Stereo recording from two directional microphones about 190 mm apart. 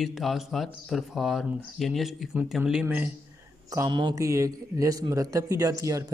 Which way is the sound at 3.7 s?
20° right (ahead or behind).